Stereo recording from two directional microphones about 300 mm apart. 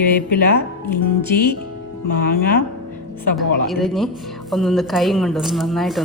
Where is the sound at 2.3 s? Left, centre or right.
Left.